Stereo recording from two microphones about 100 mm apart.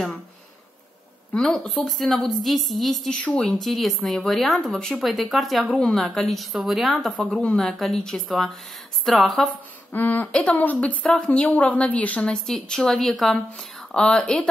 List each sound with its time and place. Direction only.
1.3 s a woman's voice: 10° left (ahead or behind)
9.9 s a woman's voice: 20° left (ahead or behind)